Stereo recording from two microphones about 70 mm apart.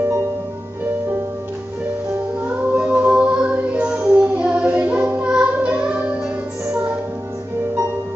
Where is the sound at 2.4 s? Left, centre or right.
Centre.